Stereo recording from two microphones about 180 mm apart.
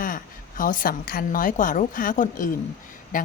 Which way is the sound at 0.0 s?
50° left (ahead or behind).